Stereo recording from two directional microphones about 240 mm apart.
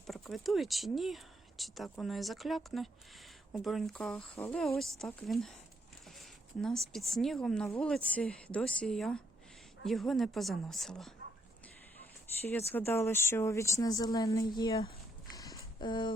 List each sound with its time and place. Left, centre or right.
0.1 s speech: centre
12.4 s speech: centre
15.3 s a sound: centre